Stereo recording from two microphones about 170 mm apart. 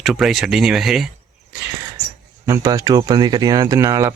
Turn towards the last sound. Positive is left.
turn(degrees=-15)  # may be behind; listen again after turning